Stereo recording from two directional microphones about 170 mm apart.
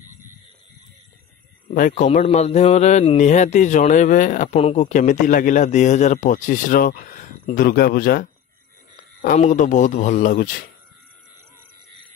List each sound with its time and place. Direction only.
2.0 s a man's voice: 40° left (ahead or behind)
4.6 s a man's voice: 40° left (ahead or behind)